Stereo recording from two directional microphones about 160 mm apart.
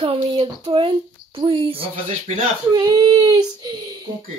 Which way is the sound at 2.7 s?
25° right (ahead or behind).